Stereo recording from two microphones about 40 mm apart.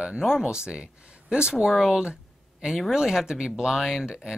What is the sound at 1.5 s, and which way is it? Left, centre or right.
Speech, centre.